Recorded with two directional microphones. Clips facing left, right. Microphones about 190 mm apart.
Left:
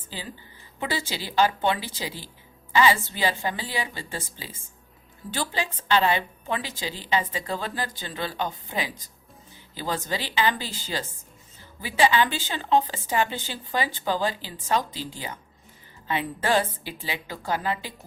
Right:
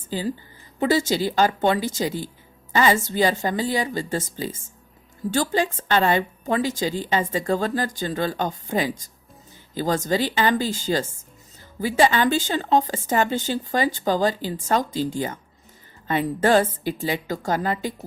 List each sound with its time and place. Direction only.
0.1 s a woman's voice: 45° right (ahead or behind)